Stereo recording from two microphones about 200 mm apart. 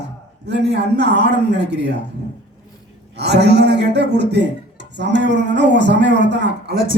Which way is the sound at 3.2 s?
55° right (ahead or behind).